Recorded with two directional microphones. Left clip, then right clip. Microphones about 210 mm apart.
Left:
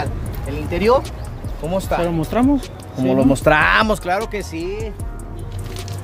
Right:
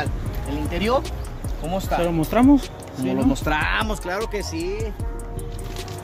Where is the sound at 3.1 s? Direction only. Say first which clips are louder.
Left 8 dB; 45° left (ahead or behind).